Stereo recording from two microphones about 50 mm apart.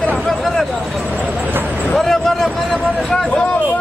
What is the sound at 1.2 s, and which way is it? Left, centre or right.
Vehicle, right.